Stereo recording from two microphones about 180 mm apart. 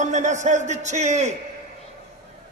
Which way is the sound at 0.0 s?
40° right (ahead or behind).